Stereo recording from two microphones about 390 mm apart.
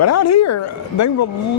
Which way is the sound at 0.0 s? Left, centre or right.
Left.